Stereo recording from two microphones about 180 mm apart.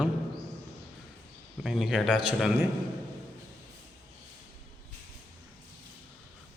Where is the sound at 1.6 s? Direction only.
Centre (ahead or behind).